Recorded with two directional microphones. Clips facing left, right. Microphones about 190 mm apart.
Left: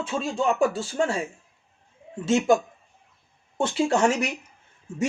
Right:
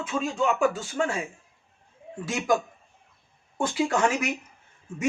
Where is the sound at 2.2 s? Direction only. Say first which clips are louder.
Left 5 dB; 25° left (ahead or behind).